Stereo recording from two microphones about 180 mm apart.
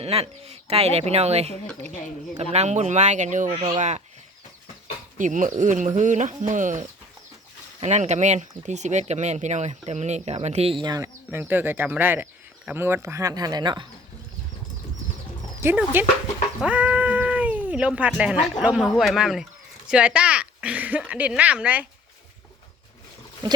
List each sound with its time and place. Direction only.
0.0 s speech: 35° right (ahead or behind)
3.5 s speech: 30° right (ahead or behind)
3.8 s speech: 40° right (ahead or behind)
5.1 s speech: 45° right (ahead or behind); by 13.8 s 25° right (ahead or behind)
15.6 s speech: 10° right (ahead or behind)